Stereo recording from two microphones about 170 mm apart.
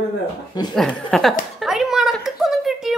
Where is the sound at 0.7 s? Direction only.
5° left (ahead or behind).